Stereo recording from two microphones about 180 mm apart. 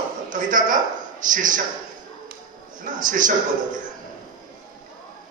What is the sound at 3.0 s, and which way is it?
Speech, 45° right (ahead or behind).